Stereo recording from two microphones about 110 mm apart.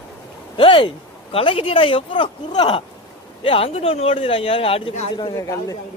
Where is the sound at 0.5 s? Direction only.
55° left (ahead or behind).